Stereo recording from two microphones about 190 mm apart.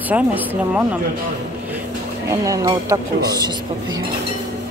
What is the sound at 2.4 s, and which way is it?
Speech, 15° right (ahead or behind).